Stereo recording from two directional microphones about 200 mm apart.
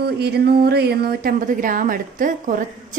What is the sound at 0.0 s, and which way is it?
Speech, 55° right (ahead or behind).